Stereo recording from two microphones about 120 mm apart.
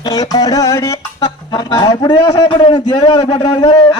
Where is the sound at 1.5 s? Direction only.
35° left (ahead or behind).